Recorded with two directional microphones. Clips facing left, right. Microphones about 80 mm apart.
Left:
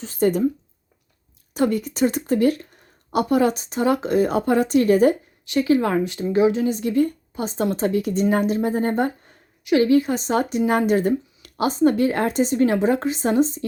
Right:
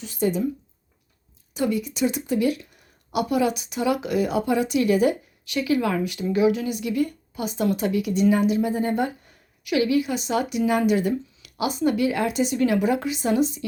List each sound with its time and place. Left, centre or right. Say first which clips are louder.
0.0 s speech: left 4 dB; left
1.5 s speech: left 4 dB; left